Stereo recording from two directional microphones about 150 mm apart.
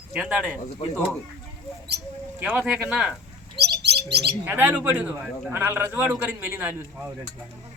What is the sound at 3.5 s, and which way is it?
Bird, 90° right.